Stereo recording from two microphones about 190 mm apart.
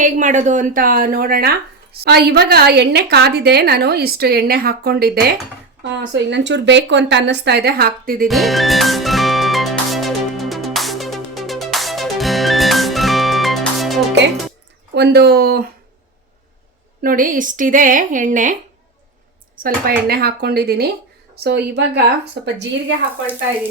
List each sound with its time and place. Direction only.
0.0 s a woman's voice: 40° right (ahead or behind)
5.8 s a woman's voice: 65° right (ahead or behind); by 8.3 s 50° right (ahead or behind)
8.3 s music: centre (ahead or behind)
14.9 s a woman's voice: 60° right (ahead or behind)
17.0 s a woman's voice: 45° right (ahead or behind)
19.6 s a woman's voice: 50° right (ahead or behind)